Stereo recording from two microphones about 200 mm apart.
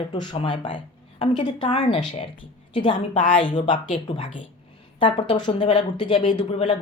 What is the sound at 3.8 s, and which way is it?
Speech, 35° left (ahead or behind).